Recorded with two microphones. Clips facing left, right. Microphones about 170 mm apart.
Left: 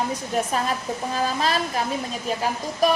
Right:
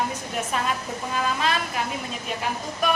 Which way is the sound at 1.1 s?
35° left (ahead or behind).